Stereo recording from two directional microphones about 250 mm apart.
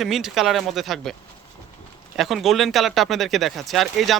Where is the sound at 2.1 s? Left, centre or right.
Centre.